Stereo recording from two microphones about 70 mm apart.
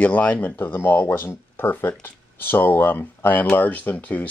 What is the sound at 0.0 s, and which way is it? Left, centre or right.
Speech, left.